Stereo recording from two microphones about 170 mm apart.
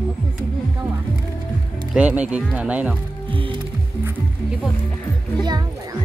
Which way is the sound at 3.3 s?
30° right (ahead or behind).